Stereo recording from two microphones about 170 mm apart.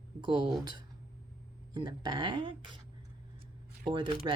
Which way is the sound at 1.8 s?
25° right (ahead or behind).